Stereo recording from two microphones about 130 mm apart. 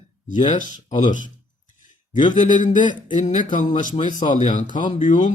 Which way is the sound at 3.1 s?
70° left (ahead or behind).